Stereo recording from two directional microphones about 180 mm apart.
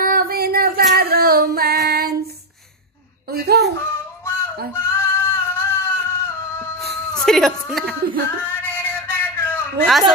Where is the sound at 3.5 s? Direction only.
65° right (ahead or behind).